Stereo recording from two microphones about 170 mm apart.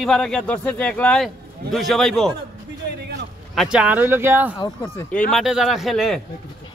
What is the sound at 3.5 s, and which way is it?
Speech, 5° right (ahead or behind).